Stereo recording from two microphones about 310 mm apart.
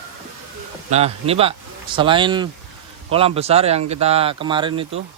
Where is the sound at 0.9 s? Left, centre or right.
Centre.